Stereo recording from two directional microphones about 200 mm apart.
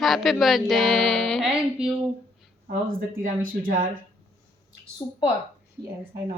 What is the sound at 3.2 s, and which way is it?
Speech, 45° right (ahead or behind).